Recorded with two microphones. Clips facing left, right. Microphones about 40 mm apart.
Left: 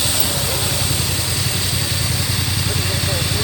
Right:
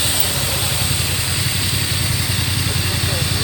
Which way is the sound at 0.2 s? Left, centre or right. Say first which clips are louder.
Even; centre.